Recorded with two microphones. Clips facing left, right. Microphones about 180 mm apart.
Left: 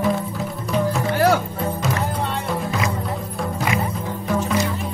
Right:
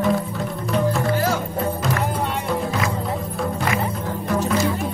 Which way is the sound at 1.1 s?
65° left (ahead or behind).